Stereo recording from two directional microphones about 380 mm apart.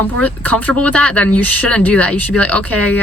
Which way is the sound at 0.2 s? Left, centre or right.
Centre.